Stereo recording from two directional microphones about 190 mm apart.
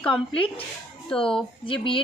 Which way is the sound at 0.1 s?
30° left (ahead or behind).